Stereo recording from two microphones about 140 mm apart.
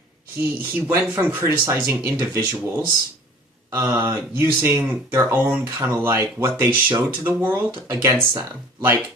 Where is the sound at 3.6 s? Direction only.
20° right (ahead or behind).